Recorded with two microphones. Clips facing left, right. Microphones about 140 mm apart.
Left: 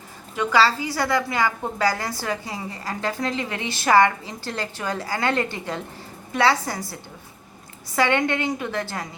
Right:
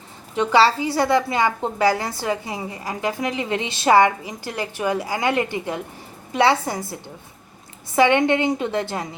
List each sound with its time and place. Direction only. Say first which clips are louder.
0.3 s a woman's voice: right 3 dB; 25° right (ahead or behind)